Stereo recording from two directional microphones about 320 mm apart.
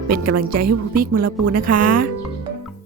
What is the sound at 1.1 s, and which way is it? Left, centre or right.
Speech, right.